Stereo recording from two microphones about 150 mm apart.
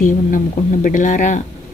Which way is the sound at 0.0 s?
60° left (ahead or behind).